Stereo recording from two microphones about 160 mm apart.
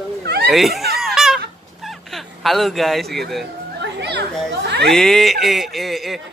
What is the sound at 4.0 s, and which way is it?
Children playing, 90° right.